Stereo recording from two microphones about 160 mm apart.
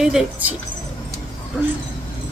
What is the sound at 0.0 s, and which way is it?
Speech, 5° right (ahead or behind).